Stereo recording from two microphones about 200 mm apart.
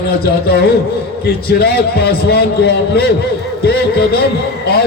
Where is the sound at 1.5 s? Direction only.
50° left (ahead or behind).